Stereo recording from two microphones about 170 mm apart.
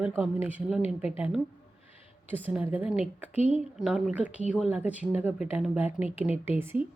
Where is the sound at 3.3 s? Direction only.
40° left (ahead or behind).